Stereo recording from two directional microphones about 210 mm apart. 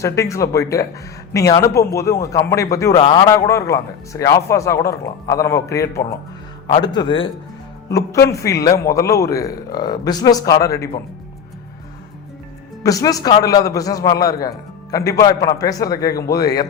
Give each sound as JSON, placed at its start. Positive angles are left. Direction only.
{"t": 0.0, "sound": "a man's voice", "side_deg": 15}
{"t": 8.3, "sound": "a man's voice", "side_deg": 15}
{"t": 12.8, "sound": "a man's voice", "side_deg": 15}